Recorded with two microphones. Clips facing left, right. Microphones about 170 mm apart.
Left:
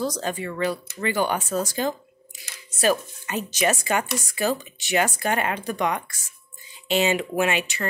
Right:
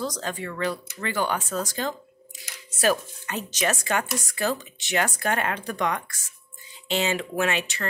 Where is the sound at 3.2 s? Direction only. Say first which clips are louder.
Left 3 dB; 10° left (ahead or behind).